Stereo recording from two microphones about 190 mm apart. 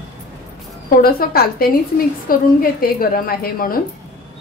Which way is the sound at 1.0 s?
50° left (ahead or behind).